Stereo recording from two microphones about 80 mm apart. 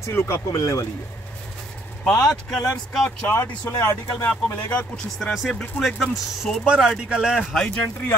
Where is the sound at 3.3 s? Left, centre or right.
Left.